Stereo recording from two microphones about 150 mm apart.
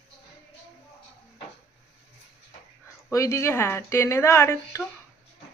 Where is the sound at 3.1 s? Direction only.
20° left (ahead or behind).